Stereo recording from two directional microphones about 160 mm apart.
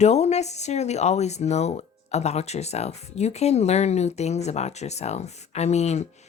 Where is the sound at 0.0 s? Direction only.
45° left (ahead or behind).